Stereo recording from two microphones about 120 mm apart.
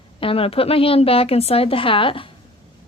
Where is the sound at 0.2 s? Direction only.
50° left (ahead or behind).